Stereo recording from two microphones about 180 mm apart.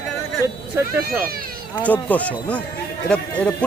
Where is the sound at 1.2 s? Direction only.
55° right (ahead or behind).